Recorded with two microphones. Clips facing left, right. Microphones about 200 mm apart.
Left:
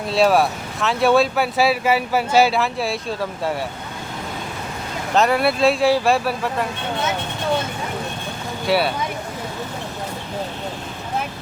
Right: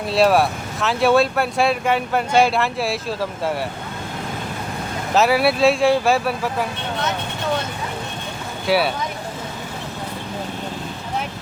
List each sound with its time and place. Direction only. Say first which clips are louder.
0.1 s speech: even; centre (ahead or behind)
5.1 s speech: right 1 dB; 5° right (ahead or behind)
8.6 s speech: even; centre (ahead or behind)